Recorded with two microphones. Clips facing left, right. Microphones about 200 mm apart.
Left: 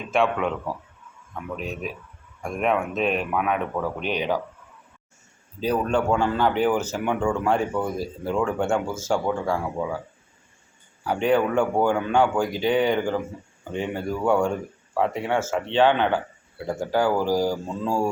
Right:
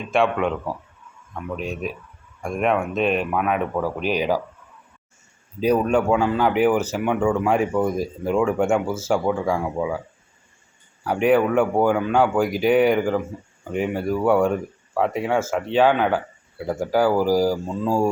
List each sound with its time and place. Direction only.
0.1 s speech: centre (ahead or behind)
5.5 s speech: 10° right (ahead or behind)
11.0 s speech: 10° right (ahead or behind)